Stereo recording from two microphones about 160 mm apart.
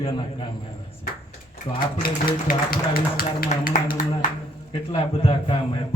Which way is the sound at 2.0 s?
65° left (ahead or behind).